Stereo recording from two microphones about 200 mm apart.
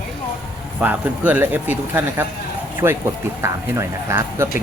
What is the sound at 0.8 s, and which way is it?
Speech, 10° right (ahead or behind).